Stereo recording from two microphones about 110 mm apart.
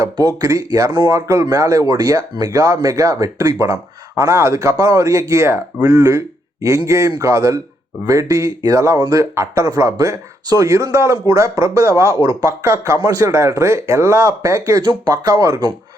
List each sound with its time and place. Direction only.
0.0 s speech: 35° right (ahead or behind)
14.8 s speech: 40° right (ahead or behind)